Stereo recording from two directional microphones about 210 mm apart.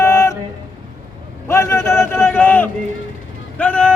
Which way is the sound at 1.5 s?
15° left (ahead or behind).